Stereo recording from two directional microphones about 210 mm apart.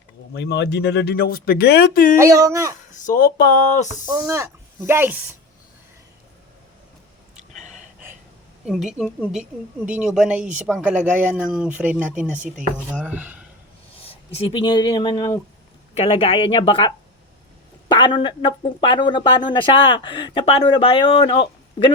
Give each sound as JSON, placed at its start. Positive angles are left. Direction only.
{"t": 0.3, "sound": "speech", "side_deg": 55}
{"t": 2.1, "sound": "speech", "side_deg": -15}
{"t": 2.9, "sound": "speech", "side_deg": 40}
{"t": 4.0, "sound": "speech", "side_deg": -15}
{"t": 8.6, "sound": "speech", "side_deg": 0}
{"t": 13.9, "sound": "a sound", "side_deg": 30}
{"t": 14.3, "sound": "speech", "side_deg": 25}